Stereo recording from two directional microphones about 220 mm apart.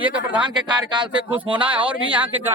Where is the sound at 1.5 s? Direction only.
5° right (ahead or behind).